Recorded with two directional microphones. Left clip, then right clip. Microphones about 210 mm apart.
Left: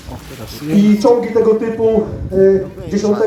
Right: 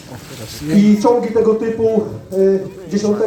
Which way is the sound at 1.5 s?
35° left (ahead or behind).